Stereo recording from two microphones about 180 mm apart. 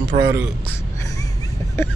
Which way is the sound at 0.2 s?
15° right (ahead or behind).